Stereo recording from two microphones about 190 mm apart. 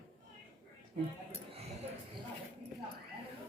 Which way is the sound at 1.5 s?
30° right (ahead or behind).